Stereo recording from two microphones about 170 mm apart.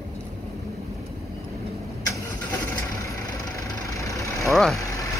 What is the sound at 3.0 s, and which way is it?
Vehicle, 20° left (ahead or behind).